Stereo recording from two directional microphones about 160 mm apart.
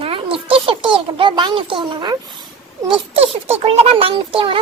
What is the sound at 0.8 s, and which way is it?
A child's voice, 30° right (ahead or behind).